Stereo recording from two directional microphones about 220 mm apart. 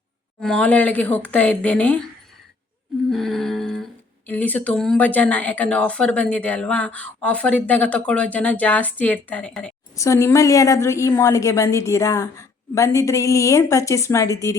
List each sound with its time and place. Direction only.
0.4 s a woman's voice: 5° left (ahead or behind)
3.1 s humming: centre (ahead or behind)
4.3 s a woman's voice: 5° left (ahead or behind)